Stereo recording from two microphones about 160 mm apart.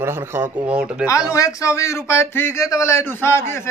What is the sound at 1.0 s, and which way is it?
A man's voice, 20° left (ahead or behind).